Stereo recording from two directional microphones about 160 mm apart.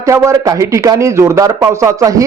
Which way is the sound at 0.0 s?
20° right (ahead or behind).